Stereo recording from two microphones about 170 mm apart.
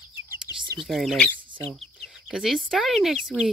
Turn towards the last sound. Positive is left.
turn(degrees=0)  # may be behind; listen again after turning